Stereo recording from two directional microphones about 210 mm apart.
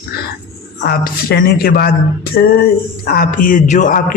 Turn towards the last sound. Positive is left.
turn(degrees=40)  # may be behind; listen again after turning